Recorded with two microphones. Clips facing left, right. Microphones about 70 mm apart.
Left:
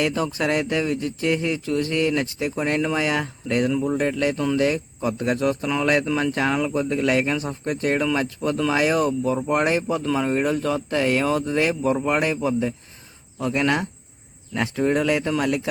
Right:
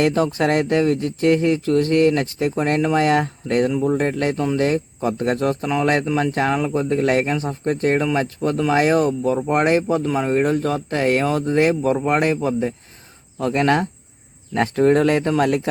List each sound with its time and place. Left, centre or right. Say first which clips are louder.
0.0 s speech: right 5 dB; right
3.7 s speech: right 3 dB; centre
3.9 s speech: right 2 dB; right
6.1 s speech: right 2 dB; right
6.6 s speech: right 3 dB; right